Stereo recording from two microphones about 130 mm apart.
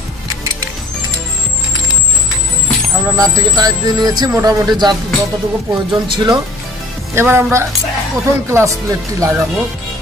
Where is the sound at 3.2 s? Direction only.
30° right (ahead or behind).